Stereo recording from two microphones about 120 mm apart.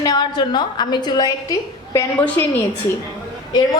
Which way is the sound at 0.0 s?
35° left (ahead or behind).